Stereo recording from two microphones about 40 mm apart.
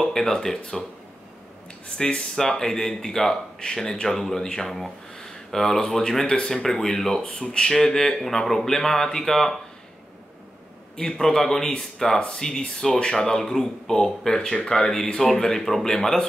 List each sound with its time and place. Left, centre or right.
0.0 s speech: centre
2.0 s speech: centre
7.2 s speech: left
11.0 s speech: centre